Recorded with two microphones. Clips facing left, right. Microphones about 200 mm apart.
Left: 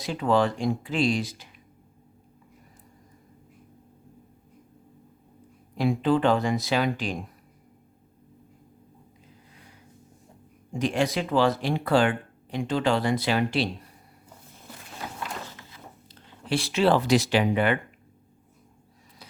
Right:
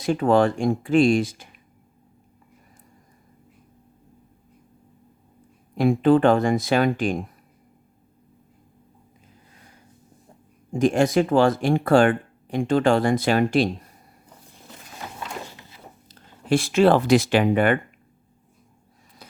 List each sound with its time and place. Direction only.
0.0 s speech: 50° right (ahead or behind)
5.7 s speech: 50° right (ahead or behind)
10.7 s speech: 45° right (ahead or behind)
15.4 s a sound: 15° right (ahead or behind)
16.0 s speech: 45° right (ahead or behind)